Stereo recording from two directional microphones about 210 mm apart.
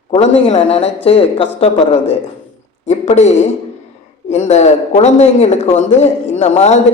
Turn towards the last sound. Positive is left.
turn(degrees=30)  # may be behind; listen again after turning